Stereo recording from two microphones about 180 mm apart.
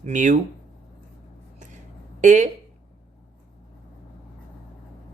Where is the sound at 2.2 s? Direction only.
45° right (ahead or behind).